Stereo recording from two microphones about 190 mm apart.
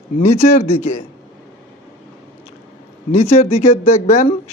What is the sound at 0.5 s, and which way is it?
Speech, 35° left (ahead or behind).